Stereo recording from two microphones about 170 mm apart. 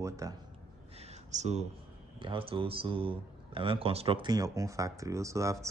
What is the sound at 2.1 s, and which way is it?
Speech, 30° right (ahead or behind).